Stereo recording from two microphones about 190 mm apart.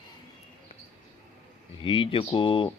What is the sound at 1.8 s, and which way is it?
Speech, 25° left (ahead or behind).